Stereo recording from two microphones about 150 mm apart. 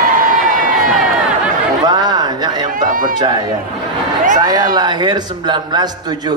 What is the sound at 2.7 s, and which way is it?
Run, 65° right (ahead or behind).